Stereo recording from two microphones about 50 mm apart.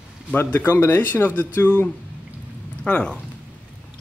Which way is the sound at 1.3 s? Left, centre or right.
Left.